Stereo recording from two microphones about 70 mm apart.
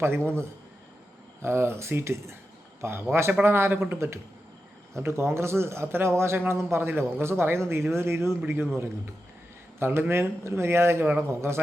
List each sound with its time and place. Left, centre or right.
1.4 s speech: right